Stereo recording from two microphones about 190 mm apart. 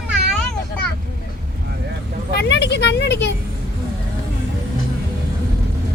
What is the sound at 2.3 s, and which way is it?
Speech, 65° left (ahead or behind).